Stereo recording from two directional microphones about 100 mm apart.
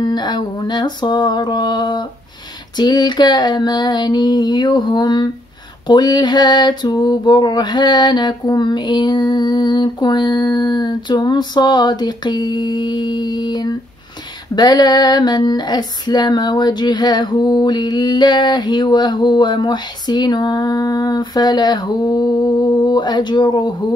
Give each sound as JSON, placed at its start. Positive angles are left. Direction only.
{"t": 0.0, "sound": "female singing", "side_deg": 45}